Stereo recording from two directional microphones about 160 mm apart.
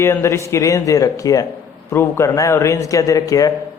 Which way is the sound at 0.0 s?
15° left (ahead or behind).